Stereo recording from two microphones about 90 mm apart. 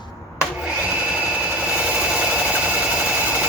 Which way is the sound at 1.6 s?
15° right (ahead or behind).